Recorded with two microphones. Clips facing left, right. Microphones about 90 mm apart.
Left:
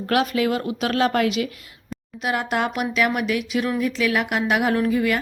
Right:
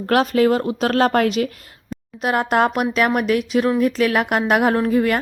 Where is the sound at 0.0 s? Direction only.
40° right (ahead or behind).